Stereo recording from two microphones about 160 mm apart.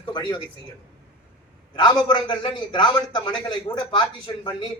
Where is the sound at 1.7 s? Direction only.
25° left (ahead or behind).